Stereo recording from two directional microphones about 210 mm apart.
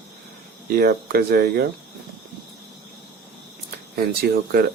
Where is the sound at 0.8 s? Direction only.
50° right (ahead or behind).